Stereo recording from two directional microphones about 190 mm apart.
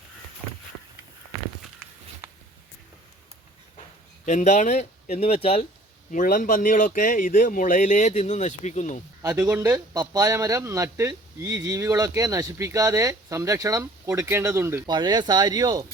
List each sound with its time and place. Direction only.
4.3 s speech: 35° left (ahead or behind)
6.1 s speech: 45° left (ahead or behind)
9.3 s speech: 10° right (ahead or behind)